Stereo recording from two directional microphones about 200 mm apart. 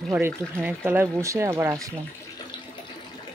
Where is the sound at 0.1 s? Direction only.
10° right (ahead or behind).